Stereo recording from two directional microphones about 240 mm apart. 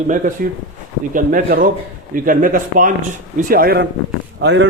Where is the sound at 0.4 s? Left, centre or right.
Right.